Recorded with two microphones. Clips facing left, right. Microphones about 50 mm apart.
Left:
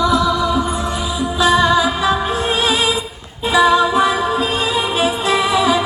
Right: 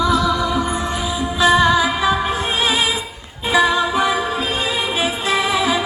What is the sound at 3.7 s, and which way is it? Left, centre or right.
Music, right.